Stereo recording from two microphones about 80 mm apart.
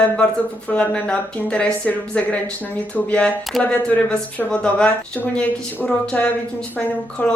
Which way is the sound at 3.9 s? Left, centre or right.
Centre.